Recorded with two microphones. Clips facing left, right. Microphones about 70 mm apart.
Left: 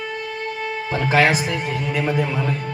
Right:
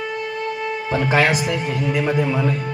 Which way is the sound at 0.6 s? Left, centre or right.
Centre.